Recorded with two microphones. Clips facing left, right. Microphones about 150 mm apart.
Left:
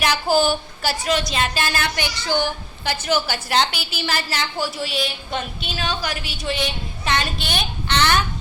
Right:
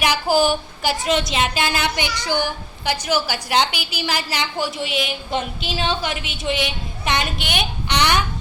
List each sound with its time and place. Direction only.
0.0 s a woman's voice: 10° right (ahead or behind)